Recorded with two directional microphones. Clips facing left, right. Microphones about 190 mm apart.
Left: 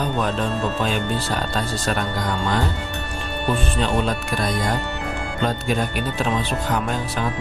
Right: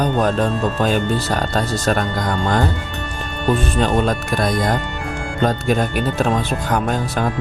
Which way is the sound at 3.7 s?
45° right (ahead or behind).